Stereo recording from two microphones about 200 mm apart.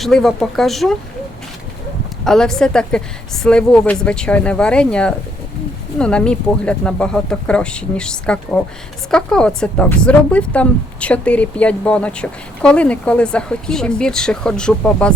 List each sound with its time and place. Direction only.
0.0 s speech: centre (ahead or behind)
2.2 s speech: centre (ahead or behind)